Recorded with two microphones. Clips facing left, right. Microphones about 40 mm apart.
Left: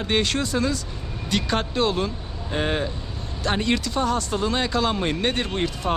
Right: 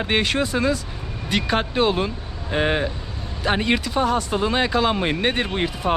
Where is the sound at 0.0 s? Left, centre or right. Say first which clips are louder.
Right 2 dB; centre.